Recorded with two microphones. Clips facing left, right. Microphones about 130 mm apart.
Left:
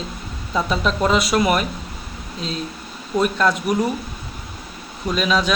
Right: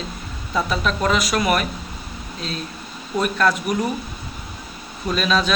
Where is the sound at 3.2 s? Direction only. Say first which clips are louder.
Left 1 dB; 20° left (ahead or behind).